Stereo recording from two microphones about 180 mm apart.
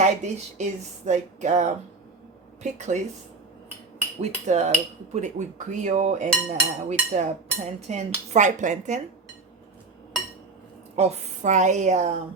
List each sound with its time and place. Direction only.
0.0 s speech: 40° right (ahead or behind)
4.2 s speech: 40° right (ahead or behind)
10.9 s speech: 40° right (ahead or behind)